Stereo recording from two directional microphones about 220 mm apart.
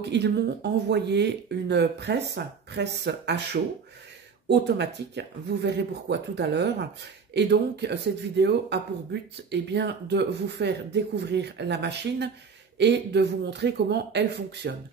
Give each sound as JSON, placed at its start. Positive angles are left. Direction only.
{"t": 0.0, "sound": "speech", "side_deg": -50}
{"t": 4.5, "sound": "speech", "side_deg": -50}